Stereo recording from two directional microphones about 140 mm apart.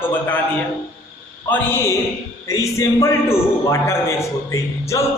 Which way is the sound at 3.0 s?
20° left (ahead or behind).